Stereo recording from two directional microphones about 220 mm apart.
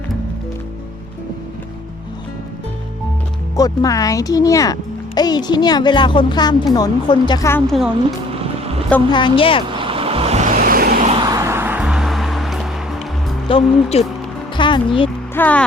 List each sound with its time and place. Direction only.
3.5 s speech: 15° left (ahead or behind)
9.1 s speech: 25° left (ahead or behind)
9.6 s vehicle: 25° right (ahead or behind); by 11.1 s 40° right (ahead or behind)
11.1 s music: 15° right (ahead or behind); by 13.0 s centre (ahead or behind)
13.5 s speech: 25° left (ahead or behind)
14.5 s music: 20° left (ahead or behind)
15.4 s speech: 5° left (ahead or behind)